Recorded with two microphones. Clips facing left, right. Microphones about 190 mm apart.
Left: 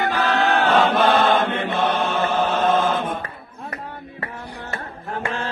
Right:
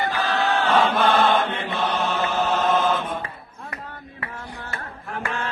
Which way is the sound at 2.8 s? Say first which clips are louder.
Left 1 dB; 50° left (ahead or behind).